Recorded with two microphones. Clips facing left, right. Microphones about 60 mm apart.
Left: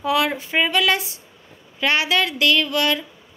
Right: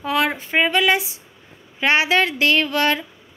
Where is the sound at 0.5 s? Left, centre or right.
Centre.